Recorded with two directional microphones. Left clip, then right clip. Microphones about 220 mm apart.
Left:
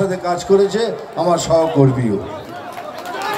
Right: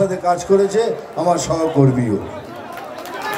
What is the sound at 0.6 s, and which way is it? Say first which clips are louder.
A man's voice: even; centre (ahead or behind).